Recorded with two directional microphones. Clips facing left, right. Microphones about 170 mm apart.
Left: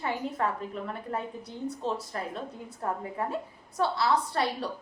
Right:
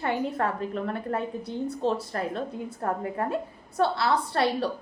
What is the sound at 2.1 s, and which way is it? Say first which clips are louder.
A woman's voice: right 5 dB; 65° right (ahead or behind).